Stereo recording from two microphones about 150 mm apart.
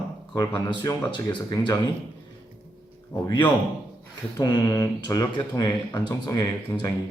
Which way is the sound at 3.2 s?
30° left (ahead or behind).